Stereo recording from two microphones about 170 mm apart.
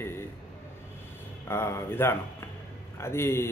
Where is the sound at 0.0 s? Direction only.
15° left (ahead or behind).